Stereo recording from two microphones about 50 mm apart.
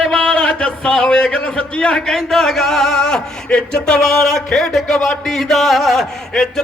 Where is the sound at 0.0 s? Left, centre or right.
Centre.